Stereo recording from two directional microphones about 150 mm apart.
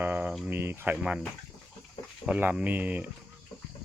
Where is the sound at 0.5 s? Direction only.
15° right (ahead or behind).